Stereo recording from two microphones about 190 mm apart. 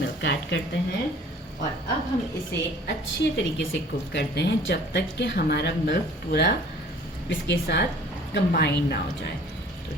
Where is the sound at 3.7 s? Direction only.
75° left (ahead or behind).